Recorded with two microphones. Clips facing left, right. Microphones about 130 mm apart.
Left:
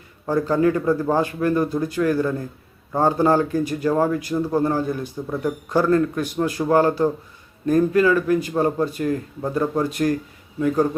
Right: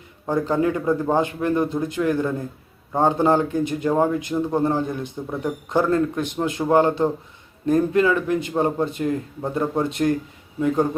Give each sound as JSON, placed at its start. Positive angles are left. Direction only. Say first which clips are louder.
{"t": 0.3, "sound": "a man's voice", "louder": "left 2 dB", "side_deg": -20}